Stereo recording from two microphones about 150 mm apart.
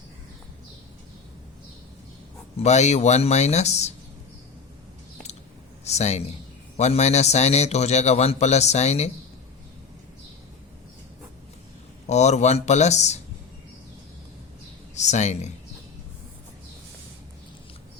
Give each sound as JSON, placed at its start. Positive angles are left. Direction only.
{"t": 2.6, "sound": "a man's voice", "side_deg": 50}
{"t": 5.8, "sound": "a man's voice", "side_deg": 45}
{"t": 12.0, "sound": "a man's voice", "side_deg": 50}
{"t": 14.9, "sound": "a man's voice", "side_deg": 50}